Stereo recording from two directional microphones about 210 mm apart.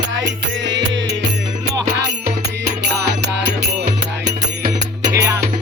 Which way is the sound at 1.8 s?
50° right (ahead or behind).